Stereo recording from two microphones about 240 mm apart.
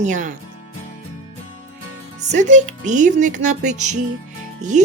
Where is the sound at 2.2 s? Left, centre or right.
Right.